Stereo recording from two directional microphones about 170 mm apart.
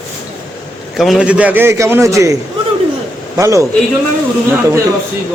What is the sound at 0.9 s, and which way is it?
A man's voice, centre (ahead or behind).